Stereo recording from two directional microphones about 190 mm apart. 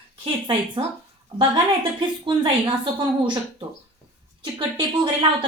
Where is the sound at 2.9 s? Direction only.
25° right (ahead or behind).